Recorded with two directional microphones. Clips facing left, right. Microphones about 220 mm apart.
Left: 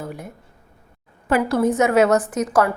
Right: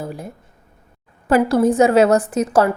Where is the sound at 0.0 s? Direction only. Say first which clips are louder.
Right 3 dB; 30° right (ahead or behind).